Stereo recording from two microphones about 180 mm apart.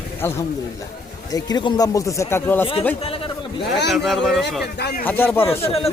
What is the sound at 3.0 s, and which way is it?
Speech, 30° left (ahead or behind).